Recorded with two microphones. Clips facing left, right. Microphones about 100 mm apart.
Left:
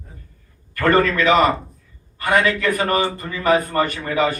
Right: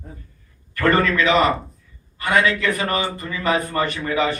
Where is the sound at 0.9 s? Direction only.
45° left (ahead or behind).